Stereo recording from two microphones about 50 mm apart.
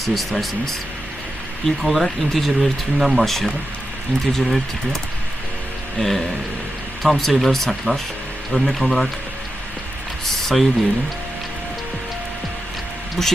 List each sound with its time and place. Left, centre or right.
0.0 s speech: centre
1.6 s speech: centre
6.0 s speech: centre
10.2 s a sound: centre
13.2 s speech: centre